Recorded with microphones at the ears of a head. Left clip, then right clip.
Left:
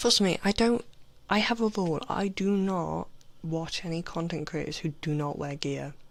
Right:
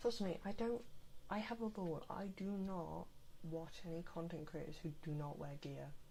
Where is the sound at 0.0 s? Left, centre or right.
Left.